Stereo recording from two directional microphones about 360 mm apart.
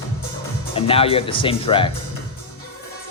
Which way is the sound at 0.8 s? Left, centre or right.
Centre.